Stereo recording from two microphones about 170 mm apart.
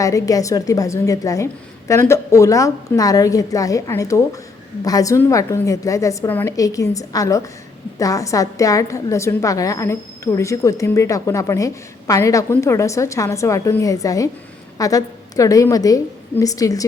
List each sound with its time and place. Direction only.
0.0 s a woman's voice: 20° left (ahead or behind)